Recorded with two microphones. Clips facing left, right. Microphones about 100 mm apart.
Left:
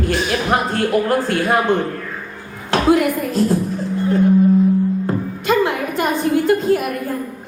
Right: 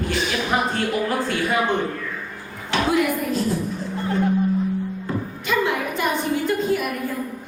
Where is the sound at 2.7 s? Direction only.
50° left (ahead or behind).